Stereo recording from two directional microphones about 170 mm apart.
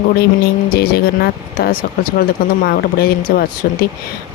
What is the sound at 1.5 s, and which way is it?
Speech, 60° left (ahead or behind).